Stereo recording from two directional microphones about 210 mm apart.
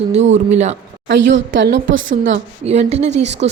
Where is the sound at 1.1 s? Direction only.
55° right (ahead or behind).